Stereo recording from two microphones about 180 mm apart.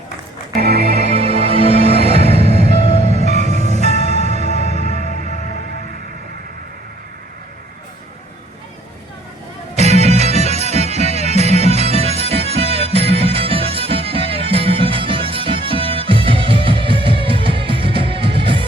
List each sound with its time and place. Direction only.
0.6 s music: 60° right (ahead or behind)
1.0 s music: 35° right (ahead or behind)
4.4 s music: 35° left (ahead or behind)
9.7 s music: 35° right (ahead or behind)